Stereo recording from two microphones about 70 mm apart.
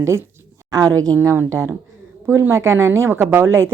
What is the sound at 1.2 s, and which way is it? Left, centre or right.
A woman's voice, right.